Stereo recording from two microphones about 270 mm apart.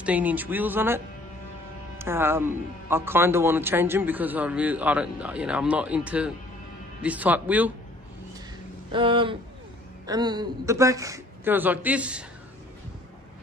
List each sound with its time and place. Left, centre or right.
0.0 s a man's voice: centre
8.9 s a man's voice: centre